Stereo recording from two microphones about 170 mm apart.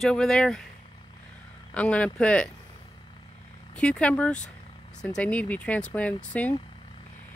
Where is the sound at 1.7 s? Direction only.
10° left (ahead or behind).